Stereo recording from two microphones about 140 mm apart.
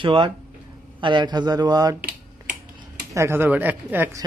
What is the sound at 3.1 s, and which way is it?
Speech, 20° right (ahead or behind).